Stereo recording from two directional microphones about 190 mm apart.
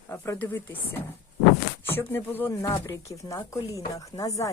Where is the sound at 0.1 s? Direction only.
15° left (ahead or behind).